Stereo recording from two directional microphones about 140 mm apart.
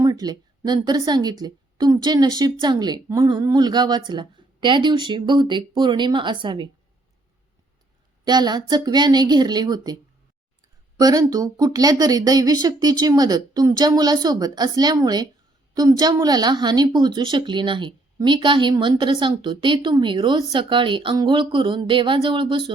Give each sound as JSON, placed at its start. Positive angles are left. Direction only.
{"t": 0.0, "sound": "speech", "side_deg": -25}
{"t": 8.2, "sound": "a woman's voice", "side_deg": -30}